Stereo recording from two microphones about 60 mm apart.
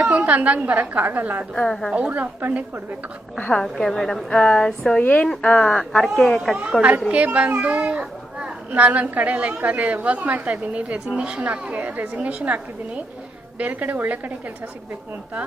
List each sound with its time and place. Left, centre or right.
0.1 s a child's voice: right
1.5 s speech: centre
2.0 s a child's voice: right
3.5 s speech: centre
4.9 s speech: left
6.0 s speech: centre
7.1 s a child's voice: right
13.6 s a child's voice: right